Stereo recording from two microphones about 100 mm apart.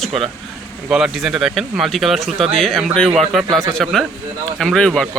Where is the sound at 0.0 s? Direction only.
Centre (ahead or behind).